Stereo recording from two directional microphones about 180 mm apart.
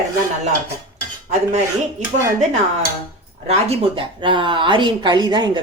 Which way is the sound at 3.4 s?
30° right (ahead or behind).